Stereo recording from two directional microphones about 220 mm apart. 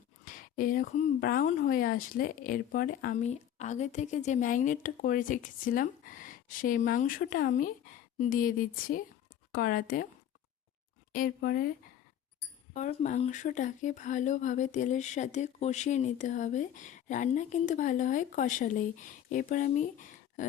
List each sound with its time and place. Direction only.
0.3 s speech: 40° left (ahead or behind)
11.1 s speech: 45° left (ahead or behind)
12.7 s speech: 30° left (ahead or behind)